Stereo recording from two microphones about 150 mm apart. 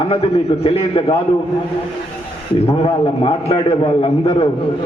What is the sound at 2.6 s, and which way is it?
A man's voice, 40° left (ahead or behind).